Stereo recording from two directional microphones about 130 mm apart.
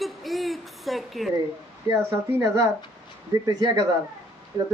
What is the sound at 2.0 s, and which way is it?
Speech, 20° right (ahead or behind).